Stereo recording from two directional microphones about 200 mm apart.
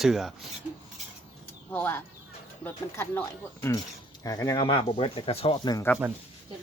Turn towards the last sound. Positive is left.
turn(degrees=20)  # may be behind; listen again after turning